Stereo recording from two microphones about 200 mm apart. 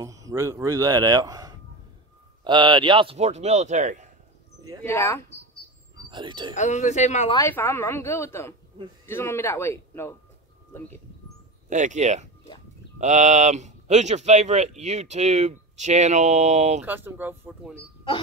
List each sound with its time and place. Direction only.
0.0 s a man's voice: 15° right (ahead or behind); by 4.1 s 40° right (ahead or behind)
4.8 s a woman's voice: 10° left (ahead or behind)
6.0 s speech: 20° right (ahead or behind)
6.5 s speech: 35° left (ahead or behind)
7.3 s a woman's voice: 10° left (ahead or behind)
11.7 s speech: 35° right (ahead or behind)
16.8 s a man's voice: 10° right (ahead or behind)